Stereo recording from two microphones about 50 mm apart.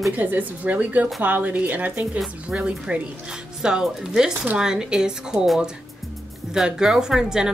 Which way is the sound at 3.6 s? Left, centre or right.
Centre.